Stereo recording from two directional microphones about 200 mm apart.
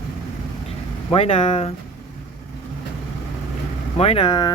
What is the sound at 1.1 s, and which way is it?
Speech, 30° left (ahead or behind).